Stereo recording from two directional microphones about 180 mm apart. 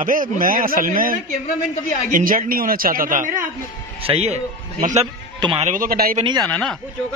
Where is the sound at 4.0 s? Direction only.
35° right (ahead or behind).